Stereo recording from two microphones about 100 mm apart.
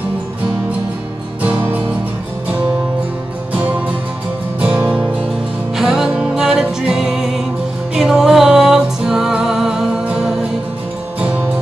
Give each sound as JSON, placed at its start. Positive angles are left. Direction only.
{"t": 1.4, "sound": "music", "side_deg": -15}
{"t": 3.5, "sound": "music", "side_deg": -15}
{"t": 11.1, "sound": "music", "side_deg": -15}